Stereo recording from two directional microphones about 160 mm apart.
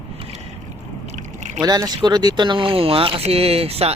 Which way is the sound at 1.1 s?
45° right (ahead or behind).